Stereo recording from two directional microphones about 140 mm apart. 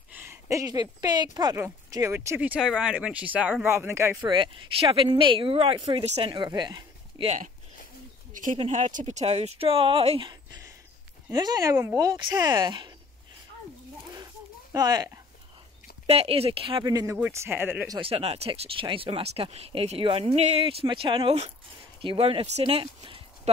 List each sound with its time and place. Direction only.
0.1 s speech: 15° right (ahead or behind)
4.2 s speech: 35° right (ahead or behind)
6.0 s speech: 50° right (ahead or behind)
6.3 s speech: 30° right (ahead or behind)
7.2 s speech: 65° right (ahead or behind)
8.5 s speech: 55° right (ahead or behind)
11.2 s speech: 30° right (ahead or behind)
14.1 s a sound: 25° right (ahead or behind)
16.1 s speech: 45° right (ahead or behind)
16.9 s speech: 20° right (ahead or behind)
17.9 s speech: 40° right (ahead or behind)